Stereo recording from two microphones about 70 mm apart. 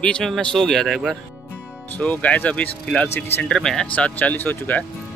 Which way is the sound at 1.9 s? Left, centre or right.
Left.